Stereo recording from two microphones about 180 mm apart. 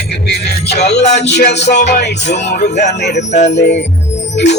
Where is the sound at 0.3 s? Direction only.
65° left (ahead or behind).